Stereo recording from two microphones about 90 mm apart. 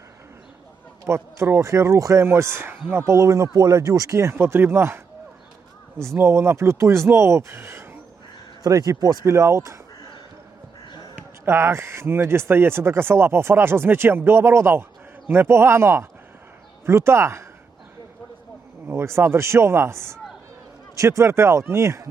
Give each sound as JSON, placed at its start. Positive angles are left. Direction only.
{"t": 1.0, "sound": "speech", "side_deg": -30}
{"t": 6.0, "sound": "speech", "side_deg": -30}
{"t": 8.6, "sound": "speech", "side_deg": -40}
{"t": 9.2, "sound": "speech", "side_deg": -30}
{"t": 11.1, "sound": "speech", "side_deg": -30}
{"t": 18.9, "sound": "speech", "side_deg": -30}